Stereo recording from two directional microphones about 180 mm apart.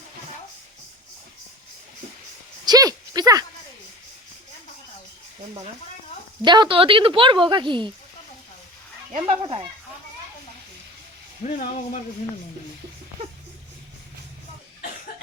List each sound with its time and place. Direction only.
2.6 s a sound: 20° right (ahead or behind)
6.4 s speech: 25° right (ahead or behind)
9.2 s speech: 30° right (ahead or behind)
11.4 s speech: 45° left (ahead or behind)